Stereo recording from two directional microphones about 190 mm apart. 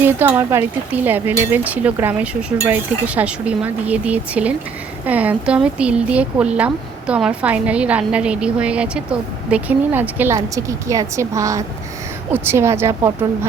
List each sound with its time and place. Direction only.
0.0 s speech: 10° right (ahead or behind)